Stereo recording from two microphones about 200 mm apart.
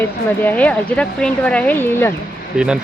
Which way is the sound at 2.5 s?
5° right (ahead or behind).